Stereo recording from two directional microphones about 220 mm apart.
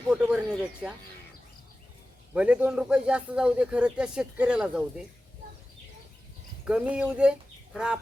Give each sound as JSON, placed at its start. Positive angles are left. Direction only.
{"t": 0.1, "sound": "a man's voice", "side_deg": -5}
{"t": 2.3, "sound": "a man's voice", "side_deg": -5}
{"t": 6.7, "sound": "speech", "side_deg": -5}